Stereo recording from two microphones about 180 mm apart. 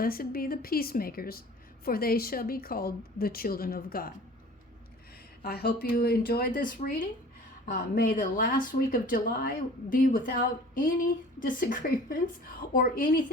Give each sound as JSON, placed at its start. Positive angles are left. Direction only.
{"t": 0.0, "sound": "speech", "side_deg": 55}
{"t": 5.4, "sound": "speech", "side_deg": 60}